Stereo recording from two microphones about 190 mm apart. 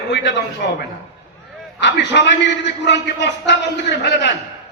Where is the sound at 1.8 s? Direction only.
65° left (ahead or behind).